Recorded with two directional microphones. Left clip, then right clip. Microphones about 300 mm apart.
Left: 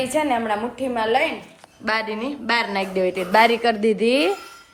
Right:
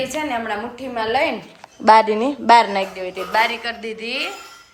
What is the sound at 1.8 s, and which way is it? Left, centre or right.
A woman's voice, centre.